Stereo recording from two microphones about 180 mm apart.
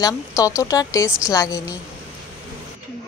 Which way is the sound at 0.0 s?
15° left (ahead or behind).